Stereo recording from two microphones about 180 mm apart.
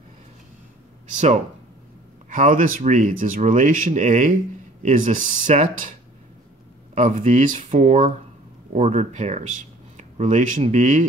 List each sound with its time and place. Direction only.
1.1 s speech: 40° right (ahead or behind)
7.0 s speech: 45° right (ahead or behind)